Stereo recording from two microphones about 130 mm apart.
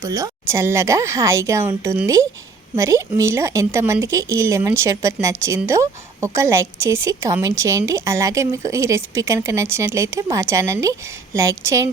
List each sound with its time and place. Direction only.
0.0 s speech: 25° right (ahead or behind)